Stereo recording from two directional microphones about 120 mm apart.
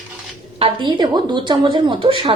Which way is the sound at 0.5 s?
45° right (ahead or behind).